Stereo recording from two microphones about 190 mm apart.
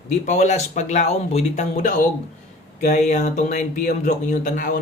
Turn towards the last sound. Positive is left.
turn(degrees=45)  # may be behind; listen again after turning